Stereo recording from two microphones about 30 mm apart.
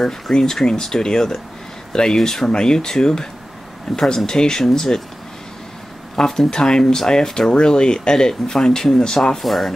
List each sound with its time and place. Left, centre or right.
0.0 s speech: centre
2.1 s speech: centre
2.4 s speech: left
3.9 s speech: centre
4.3 s speech: left
6.1 s speech: centre
9.4 s speech: centre